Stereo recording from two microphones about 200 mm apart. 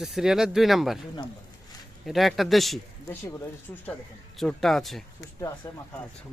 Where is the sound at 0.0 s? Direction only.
Centre (ahead or behind).